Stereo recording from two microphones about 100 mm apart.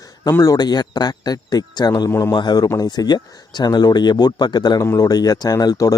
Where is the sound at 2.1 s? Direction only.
25° left (ahead or behind).